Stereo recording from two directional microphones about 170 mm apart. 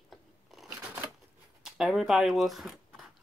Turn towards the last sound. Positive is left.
turn(degrees=0)  # may be behind; listen again after turning